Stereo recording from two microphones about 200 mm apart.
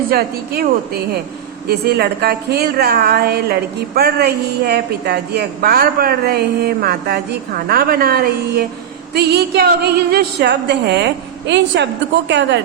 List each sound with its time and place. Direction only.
0.1 s a woman's voice: 50° right (ahead or behind)